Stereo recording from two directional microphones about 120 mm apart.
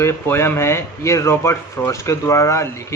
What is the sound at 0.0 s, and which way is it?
Speech, 20° left (ahead or behind).